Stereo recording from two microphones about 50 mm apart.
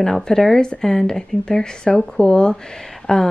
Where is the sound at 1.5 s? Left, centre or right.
Left.